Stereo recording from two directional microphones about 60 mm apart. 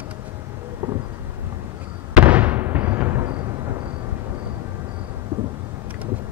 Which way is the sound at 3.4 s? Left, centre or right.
Right.